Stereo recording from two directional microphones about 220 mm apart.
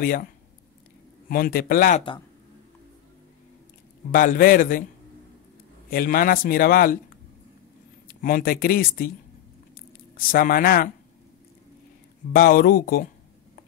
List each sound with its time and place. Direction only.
0.0 s a man's voice: 40° left (ahead or behind)
1.3 s a man's voice: 40° left (ahead or behind)
4.1 s a man's voice: 40° left (ahead or behind)
5.9 s a man's voice: 40° left (ahead or behind)
8.1 s a man's voice: 40° left (ahead or behind)
9.8 s squish: 40° left (ahead or behind)
12.3 s a man's voice: 40° left (ahead or behind)